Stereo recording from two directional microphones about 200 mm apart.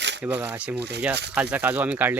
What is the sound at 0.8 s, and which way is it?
Speech, 55° right (ahead or behind).